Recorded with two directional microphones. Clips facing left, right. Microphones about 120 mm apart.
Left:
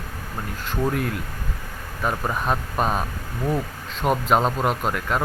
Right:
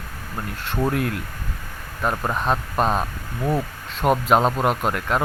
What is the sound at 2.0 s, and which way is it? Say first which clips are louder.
Speech: right 1 dB; 10° right (ahead or behind).